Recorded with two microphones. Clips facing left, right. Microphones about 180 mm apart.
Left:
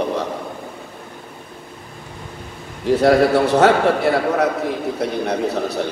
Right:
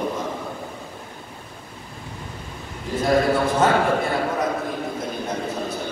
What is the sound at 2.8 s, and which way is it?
A man's voice, 70° left (ahead or behind).